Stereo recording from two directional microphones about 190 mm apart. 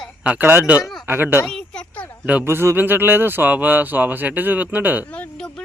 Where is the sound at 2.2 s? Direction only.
10° right (ahead or behind).